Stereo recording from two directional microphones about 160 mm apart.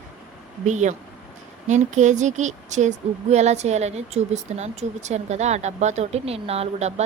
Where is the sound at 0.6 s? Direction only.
50° right (ahead or behind).